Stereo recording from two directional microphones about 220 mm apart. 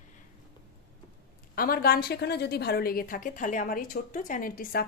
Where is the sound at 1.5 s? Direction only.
40° left (ahead or behind).